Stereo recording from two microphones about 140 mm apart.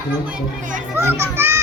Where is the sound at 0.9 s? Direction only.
20° right (ahead or behind).